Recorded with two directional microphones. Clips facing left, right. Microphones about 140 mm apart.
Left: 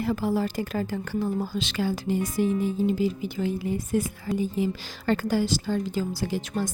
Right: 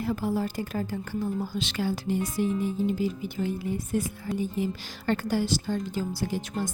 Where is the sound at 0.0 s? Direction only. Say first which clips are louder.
Left 2 dB; 90° left.